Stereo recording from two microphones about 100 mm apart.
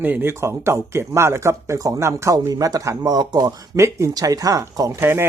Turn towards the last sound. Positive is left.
turn(degrees=-25)  # may be behind; listen again after turning